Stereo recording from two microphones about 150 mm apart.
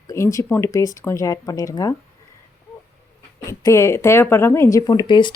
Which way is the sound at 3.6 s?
20° left (ahead or behind).